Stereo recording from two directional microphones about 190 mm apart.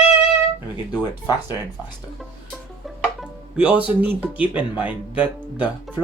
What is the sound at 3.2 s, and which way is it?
Speech, 5° right (ahead or behind).